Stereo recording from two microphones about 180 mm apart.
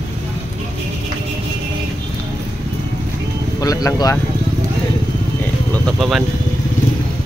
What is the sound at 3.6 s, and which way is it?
Vehicle, 20° left (ahead or behind).